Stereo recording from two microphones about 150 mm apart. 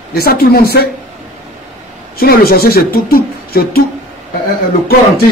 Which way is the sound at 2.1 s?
85° left.